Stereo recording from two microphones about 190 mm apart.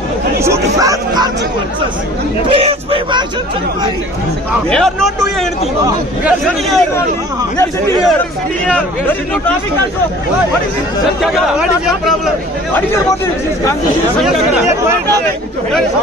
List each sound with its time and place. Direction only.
0.4 s speech: 15° right (ahead or behind)
2.5 s speech: 30° right (ahead or behind)
4.6 s speech: 5° left (ahead or behind)
8.6 s speech: 5° left (ahead or behind)
11.3 s speech: 5° right (ahead or behind)